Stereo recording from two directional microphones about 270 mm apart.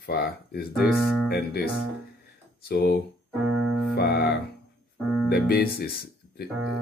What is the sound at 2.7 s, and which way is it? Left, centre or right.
Speech, left.